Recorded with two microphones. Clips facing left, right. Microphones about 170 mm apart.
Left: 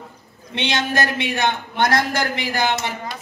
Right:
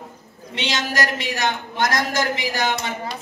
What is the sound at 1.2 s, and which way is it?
Speech, 55° left (ahead or behind).